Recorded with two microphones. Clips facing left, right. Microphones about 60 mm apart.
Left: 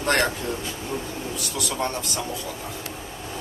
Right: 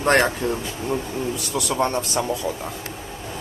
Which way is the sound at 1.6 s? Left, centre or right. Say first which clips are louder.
Right 6 dB; right.